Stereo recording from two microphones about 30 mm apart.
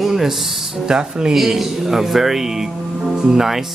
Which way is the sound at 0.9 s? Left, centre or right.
Centre.